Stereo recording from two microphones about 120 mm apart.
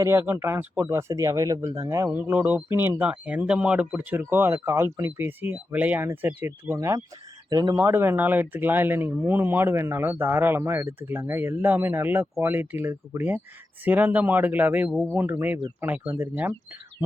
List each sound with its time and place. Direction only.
0.0 s speech: 20° right (ahead or behind)
6.7 s speech: 30° right (ahead or behind)
7.8 s speech: 20° right (ahead or behind)